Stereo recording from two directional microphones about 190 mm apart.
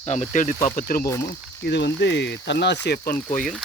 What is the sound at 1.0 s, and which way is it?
Speech, 15° left (ahead or behind).